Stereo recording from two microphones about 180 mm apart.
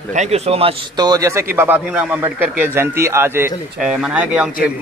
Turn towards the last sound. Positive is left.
turn(degrees=-5)  # may be behind; listen again after turning